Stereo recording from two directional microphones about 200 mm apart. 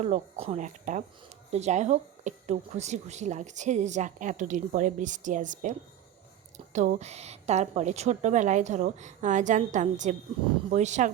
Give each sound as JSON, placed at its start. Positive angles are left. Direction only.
{"t": 0.0, "sound": "a woman's voice", "side_deg": -35}
{"t": 6.7, "sound": "a woman's voice", "side_deg": -35}